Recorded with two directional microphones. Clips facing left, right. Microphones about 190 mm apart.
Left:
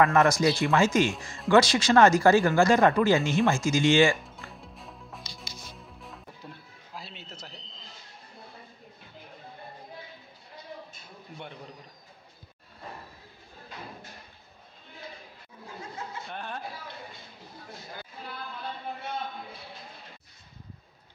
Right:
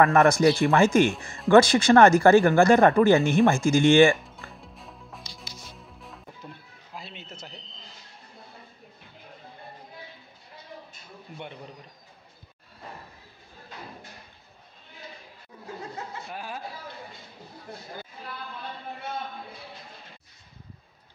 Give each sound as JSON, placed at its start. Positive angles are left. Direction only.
{"t": 0.1, "sound": "speech", "side_deg": -55}
{"t": 4.2, "sound": "music", "side_deg": 0}
{"t": 16.3, "sound": "a sound", "side_deg": -5}